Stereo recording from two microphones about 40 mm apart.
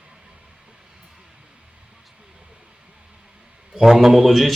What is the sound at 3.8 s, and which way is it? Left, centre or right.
Speech, centre.